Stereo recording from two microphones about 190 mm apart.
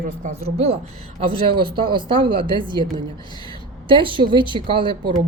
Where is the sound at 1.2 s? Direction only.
25° right (ahead or behind).